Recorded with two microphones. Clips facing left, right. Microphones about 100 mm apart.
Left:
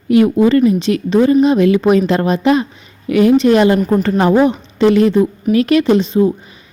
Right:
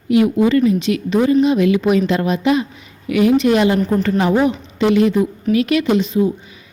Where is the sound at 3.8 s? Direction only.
15° left (ahead or behind).